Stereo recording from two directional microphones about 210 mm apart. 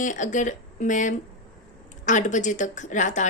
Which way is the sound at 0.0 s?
35° left (ahead or behind).